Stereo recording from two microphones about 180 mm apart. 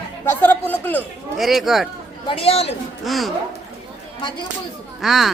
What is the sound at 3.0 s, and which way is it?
Speech, centre (ahead or behind).